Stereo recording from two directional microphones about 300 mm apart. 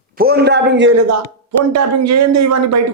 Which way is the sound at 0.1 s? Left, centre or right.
Right.